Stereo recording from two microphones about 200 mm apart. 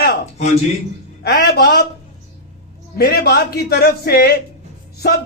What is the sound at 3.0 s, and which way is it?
A man's voice, 50° left (ahead or behind).